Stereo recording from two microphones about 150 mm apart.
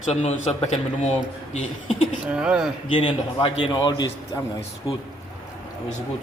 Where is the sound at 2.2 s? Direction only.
5° right (ahead or behind).